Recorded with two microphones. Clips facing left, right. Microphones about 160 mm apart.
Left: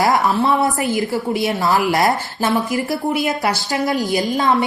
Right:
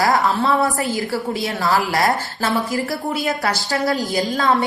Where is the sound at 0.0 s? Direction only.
20° left (ahead or behind).